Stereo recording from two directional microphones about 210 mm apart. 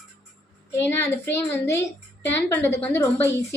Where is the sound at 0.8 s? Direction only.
10° left (ahead or behind).